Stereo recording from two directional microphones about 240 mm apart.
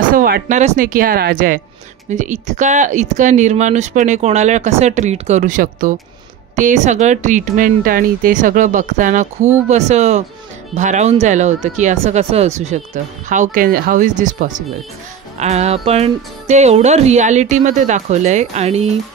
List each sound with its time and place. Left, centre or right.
0.1 s speech: right